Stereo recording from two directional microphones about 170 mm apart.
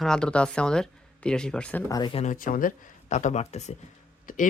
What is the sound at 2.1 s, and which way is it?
Speech, 45° left (ahead or behind).